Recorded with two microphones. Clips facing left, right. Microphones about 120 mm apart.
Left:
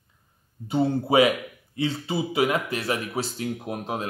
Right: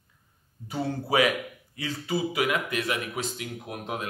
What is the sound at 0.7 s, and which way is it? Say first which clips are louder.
A man's voice: left 6 dB; 25° left (ahead or behind).